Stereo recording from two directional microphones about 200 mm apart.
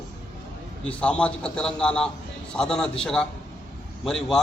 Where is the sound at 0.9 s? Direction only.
5° left (ahead or behind).